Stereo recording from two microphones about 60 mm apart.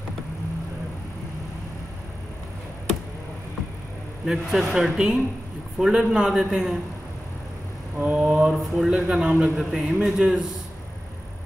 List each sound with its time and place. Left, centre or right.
4.3 s a man's voice: centre
8.0 s a man's voice: centre
9.6 s a man's voice: centre